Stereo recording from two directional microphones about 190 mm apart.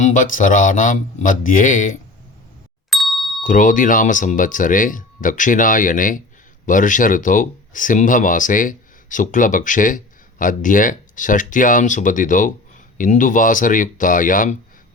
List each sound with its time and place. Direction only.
0.0 s speech: 45° left (ahead or behind)
2.9 s ding: centre (ahead or behind)
3.4 s speech: 40° left (ahead or behind)